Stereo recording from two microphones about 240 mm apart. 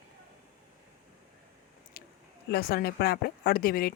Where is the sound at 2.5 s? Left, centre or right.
Left.